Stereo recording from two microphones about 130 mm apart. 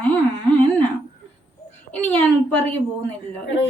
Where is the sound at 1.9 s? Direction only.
15° left (ahead or behind).